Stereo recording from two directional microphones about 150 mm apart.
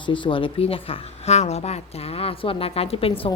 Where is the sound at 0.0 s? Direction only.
35° left (ahead or behind).